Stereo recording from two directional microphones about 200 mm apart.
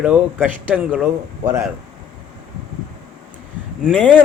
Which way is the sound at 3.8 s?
5° left (ahead or behind).